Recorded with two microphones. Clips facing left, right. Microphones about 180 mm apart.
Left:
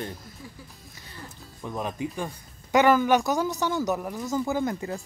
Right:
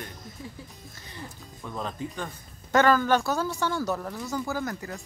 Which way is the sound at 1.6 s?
15° left (ahead or behind).